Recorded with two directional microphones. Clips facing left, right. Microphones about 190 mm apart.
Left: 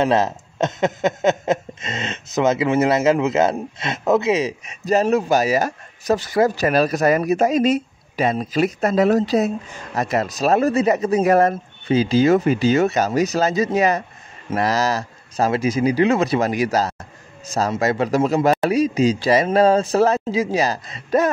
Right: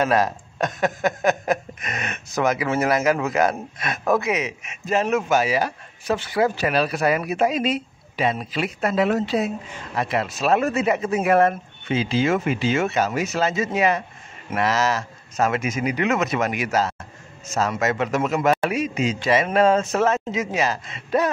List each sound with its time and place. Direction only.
0.0 s speech: 25° left (ahead or behind); by 21.3 s 40° left (ahead or behind)